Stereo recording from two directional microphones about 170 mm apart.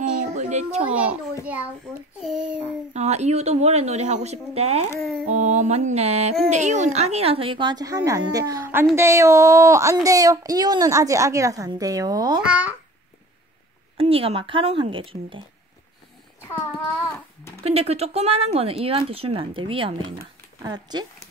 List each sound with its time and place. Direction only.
0.1 s a sound: 45° right (ahead or behind)
0.8 s speech: 10° right (ahead or behind)
2.2 s a child's voice: 5° right (ahead or behind)
2.9 s speech: 40° right (ahead or behind)
5.2 s music: 45° right (ahead or behind)
6.5 s a woman's voice: 45° right (ahead or behind); by 12.4 s 20° right (ahead or behind)
12.4 s speech: 5° right (ahead or behind)
13.9 s speech: 35° right (ahead or behind)
17.6 s a woman's voice: 35° right (ahead or behind)